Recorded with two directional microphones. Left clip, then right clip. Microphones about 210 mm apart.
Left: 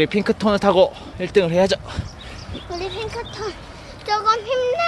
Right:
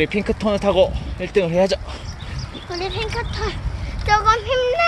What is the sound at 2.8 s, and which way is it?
Speech, 20° right (ahead or behind).